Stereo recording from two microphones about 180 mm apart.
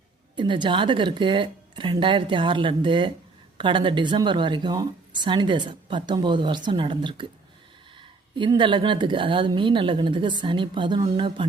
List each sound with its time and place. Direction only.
0.3 s speech: 25° right (ahead or behind)
8.4 s speech: 25° right (ahead or behind)